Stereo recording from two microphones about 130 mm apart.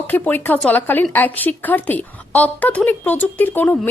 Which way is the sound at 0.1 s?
15° left (ahead or behind).